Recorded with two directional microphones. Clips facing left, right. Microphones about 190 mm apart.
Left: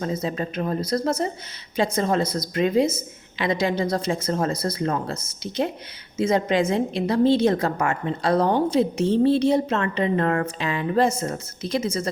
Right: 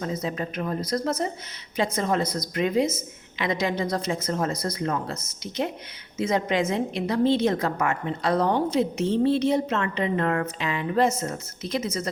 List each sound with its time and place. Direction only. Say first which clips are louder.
0.0 s a woman's voice: left 3 dB; 30° left (ahead or behind)